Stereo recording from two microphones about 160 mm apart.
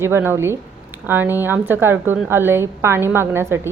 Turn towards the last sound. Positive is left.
turn(degrees=-15)  # may be behind; listen again after turning